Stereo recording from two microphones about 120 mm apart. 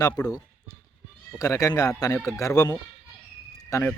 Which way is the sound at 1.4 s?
30° left (ahead or behind).